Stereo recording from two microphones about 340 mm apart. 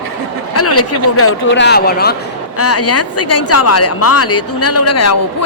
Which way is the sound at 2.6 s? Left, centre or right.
Left.